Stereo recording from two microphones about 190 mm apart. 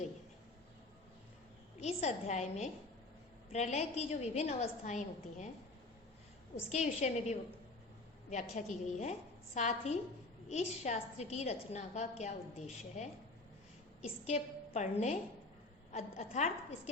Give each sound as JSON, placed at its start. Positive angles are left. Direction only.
{"t": 1.8, "sound": "a woman's voice", "side_deg": 35}
{"t": 6.7, "sound": "a woman's voice", "side_deg": 35}